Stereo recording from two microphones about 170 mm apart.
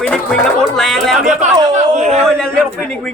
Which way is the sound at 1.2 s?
45° right (ahead or behind).